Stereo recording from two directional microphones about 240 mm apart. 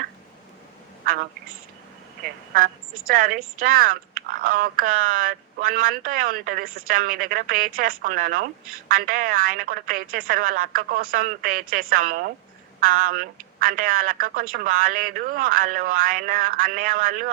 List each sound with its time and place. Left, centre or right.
3.1 s speech: right